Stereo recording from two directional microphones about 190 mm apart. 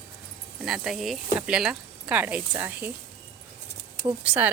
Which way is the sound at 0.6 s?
Centre (ahead or behind).